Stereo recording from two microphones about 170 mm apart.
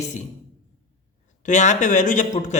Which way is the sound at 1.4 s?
45° left (ahead or behind).